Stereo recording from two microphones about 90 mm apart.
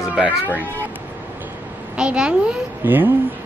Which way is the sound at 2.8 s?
20° right (ahead or behind).